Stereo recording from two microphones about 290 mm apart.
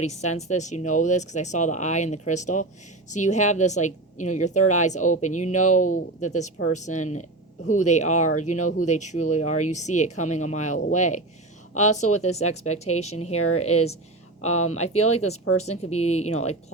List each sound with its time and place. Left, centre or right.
0.0 s a woman's voice: left
12.5 s a woman's voice: left
14.9 s a woman's voice: left
16.3 s a woman's voice: left